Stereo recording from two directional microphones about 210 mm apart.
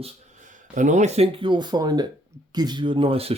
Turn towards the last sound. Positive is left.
turn(degrees=-25)  # may be behind; listen again after turning